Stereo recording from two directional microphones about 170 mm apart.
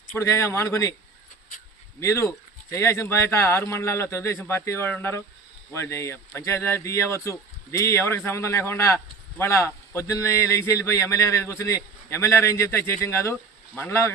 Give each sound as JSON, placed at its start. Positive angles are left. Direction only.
{"t": 0.2, "sound": "speech", "side_deg": 15}
{"t": 2.0, "sound": "speech", "side_deg": 15}